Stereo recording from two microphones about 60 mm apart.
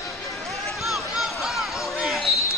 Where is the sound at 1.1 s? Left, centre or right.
Centre.